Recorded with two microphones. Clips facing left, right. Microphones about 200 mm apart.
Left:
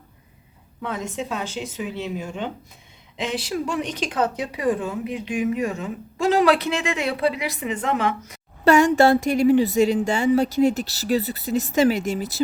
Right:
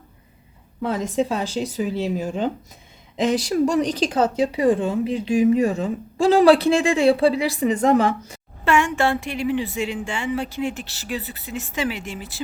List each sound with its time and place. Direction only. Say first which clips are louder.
0.8 s speech: right 7 dB; 35° right (ahead or behind)
8.6 s a woman's voice: left 5 dB; 40° left (ahead or behind)